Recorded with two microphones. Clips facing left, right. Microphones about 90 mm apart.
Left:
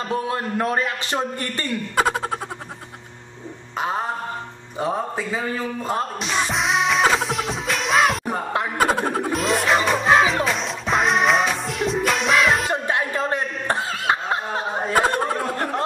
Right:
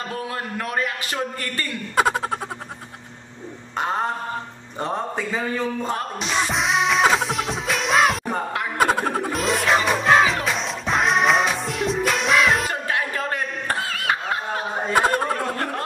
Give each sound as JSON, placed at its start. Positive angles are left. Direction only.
{"t": 0.1, "sound": "a man's voice", "side_deg": 25}
{"t": 2.0, "sound": "speech", "side_deg": 0}
{"t": 3.7, "sound": "a sound", "side_deg": 5}
{"t": 4.7, "sound": "speech", "side_deg": 5}
{"t": 6.1, "sound": "music", "side_deg": 0}
{"t": 8.7, "sound": "a sound", "side_deg": 0}
{"t": 9.1, "sound": "music", "side_deg": 0}
{"t": 12.8, "sound": "chuckle", "side_deg": 25}
{"t": 14.9, "sound": "a sound", "side_deg": 0}